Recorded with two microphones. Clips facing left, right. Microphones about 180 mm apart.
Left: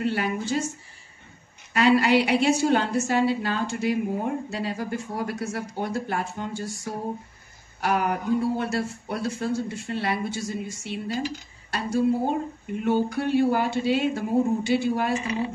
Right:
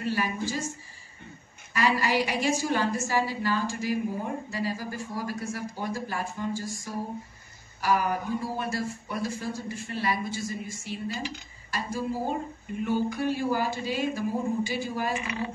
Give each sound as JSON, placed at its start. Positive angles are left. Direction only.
{"t": 0.0, "sound": "a woman's voice", "side_deg": 70}
{"t": 1.7, "sound": "a woman's voice", "side_deg": 70}